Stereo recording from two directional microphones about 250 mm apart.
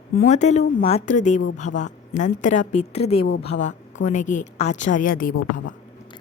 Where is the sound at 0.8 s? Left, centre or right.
Left.